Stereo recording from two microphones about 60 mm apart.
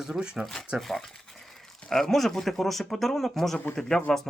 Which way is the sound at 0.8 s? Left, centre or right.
Centre.